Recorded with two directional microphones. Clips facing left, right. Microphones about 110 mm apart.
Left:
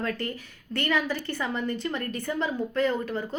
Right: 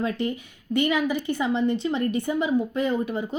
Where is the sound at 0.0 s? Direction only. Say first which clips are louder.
Right 4 dB; 15° right (ahead or behind).